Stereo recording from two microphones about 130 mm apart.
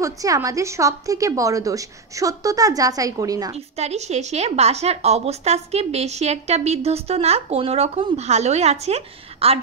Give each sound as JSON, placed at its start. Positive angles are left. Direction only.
{"t": 0.0, "sound": "a woman's voice", "side_deg": -25}
{"t": 3.5, "sound": "a woman's voice", "side_deg": -55}